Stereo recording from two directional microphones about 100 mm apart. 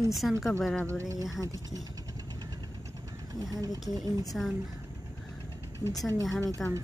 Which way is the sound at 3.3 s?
40° right (ahead or behind).